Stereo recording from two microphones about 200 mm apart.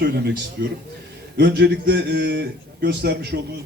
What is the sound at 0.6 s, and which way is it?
A man's voice, 55° right (ahead or behind).